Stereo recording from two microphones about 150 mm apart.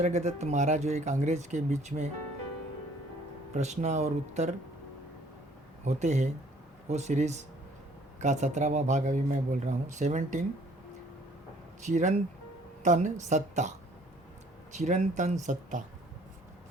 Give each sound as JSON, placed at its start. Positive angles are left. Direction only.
{"t": 0.0, "sound": "speech", "side_deg": -50}
{"t": 3.5, "sound": "speech", "side_deg": -50}
{"t": 5.8, "sound": "speech", "side_deg": -50}
{"t": 11.8, "sound": "speech", "side_deg": -55}